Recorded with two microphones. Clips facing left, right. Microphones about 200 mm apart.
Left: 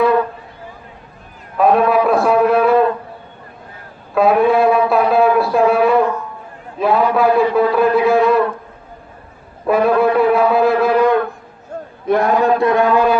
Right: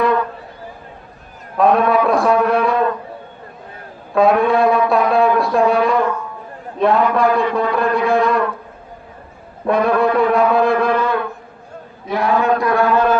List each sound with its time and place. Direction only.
1.5 s a man's voice: 5° left (ahead or behind)
4.1 s a sound: 5° left (ahead or behind)
6.7 s a man's voice: 5° left (ahead or behind)
9.6 s a man's voice: 5° left (ahead or behind)
12.0 s a man's voice: 50° left (ahead or behind)
12.4 s a man's voice: 25° left (ahead or behind)